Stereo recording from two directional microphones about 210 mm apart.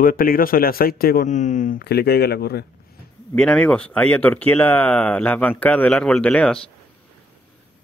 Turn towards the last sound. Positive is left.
turn(degrees=5)  # may be behind; listen again after turning